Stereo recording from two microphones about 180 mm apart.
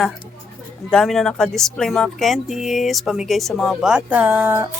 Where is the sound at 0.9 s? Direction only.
5° left (ahead or behind).